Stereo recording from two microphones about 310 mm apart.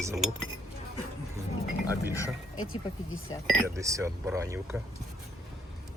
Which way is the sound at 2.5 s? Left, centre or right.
Left.